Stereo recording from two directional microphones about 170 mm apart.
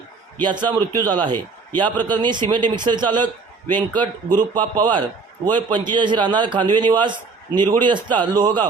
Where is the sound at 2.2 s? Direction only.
25° right (ahead or behind).